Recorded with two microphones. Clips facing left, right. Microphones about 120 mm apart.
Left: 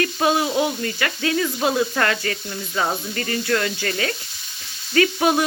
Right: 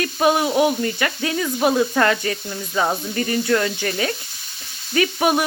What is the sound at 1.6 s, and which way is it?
Speech, 20° right (ahead or behind).